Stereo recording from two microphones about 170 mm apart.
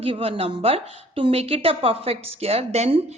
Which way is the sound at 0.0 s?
35° right (ahead or behind).